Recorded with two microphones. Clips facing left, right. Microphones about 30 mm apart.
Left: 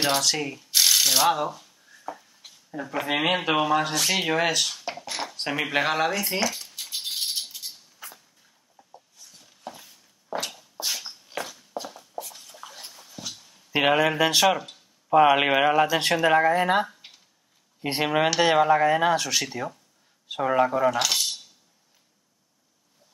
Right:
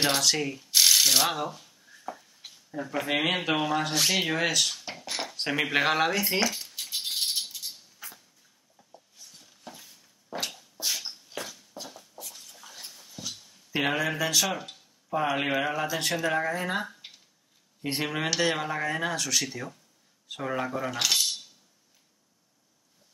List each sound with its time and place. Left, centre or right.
0.0 s mechanisms: centre
1.5 s a sound: centre
2.7 s speech: centre
7.0 s a sound: centre
8.0 s dog: centre
9.7 s a sound: left
12.6 s dog: left
13.7 s speech: left
17.8 s speech: left
20.9 s rattle: centre